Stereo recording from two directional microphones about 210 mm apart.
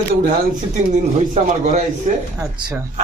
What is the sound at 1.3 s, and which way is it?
Speech, 35° right (ahead or behind).